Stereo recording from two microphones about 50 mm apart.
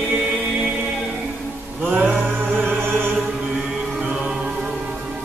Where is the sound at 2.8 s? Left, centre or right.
Right.